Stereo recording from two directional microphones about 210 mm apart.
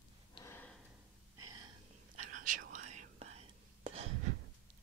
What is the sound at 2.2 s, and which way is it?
Whispering, 40° right (ahead or behind).